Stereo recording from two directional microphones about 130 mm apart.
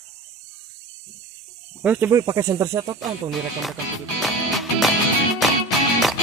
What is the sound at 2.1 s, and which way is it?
Speech, 25° right (ahead or behind).